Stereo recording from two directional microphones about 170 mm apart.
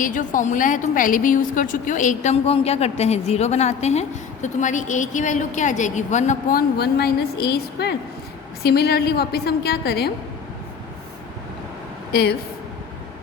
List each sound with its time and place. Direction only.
0.0 s a woman's voice: 50° left (ahead or behind); by 10.1 s 65° left (ahead or behind)
12.1 s a woman's voice: 70° left (ahead or behind)